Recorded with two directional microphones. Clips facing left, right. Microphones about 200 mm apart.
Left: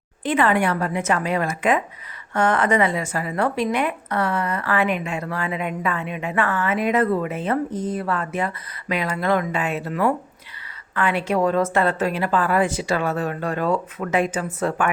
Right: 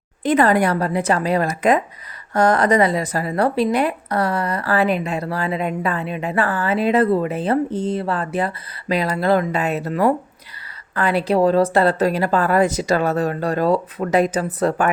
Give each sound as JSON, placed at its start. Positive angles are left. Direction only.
{"t": 0.2, "sound": "a woman's voice", "side_deg": -40}